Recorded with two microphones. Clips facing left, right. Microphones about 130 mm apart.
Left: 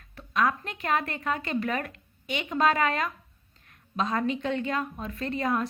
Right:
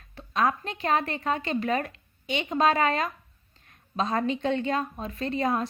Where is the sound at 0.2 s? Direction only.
25° right (ahead or behind).